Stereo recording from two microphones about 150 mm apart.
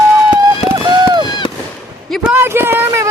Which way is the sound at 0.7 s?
30° right (ahead or behind).